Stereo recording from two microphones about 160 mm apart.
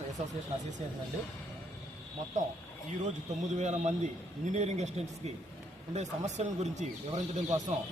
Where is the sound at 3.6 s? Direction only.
45° right (ahead or behind).